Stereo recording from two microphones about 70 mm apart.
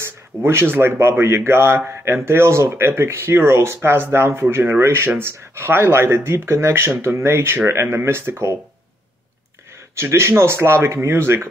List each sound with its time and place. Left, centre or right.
0.0 s speech: right
9.9 s speech: right